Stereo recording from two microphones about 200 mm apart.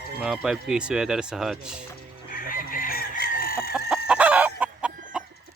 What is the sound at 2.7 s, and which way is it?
Chicken, 45° left (ahead or behind).